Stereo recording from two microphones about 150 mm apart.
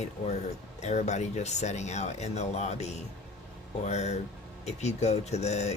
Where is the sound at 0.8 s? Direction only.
50° left (ahead or behind).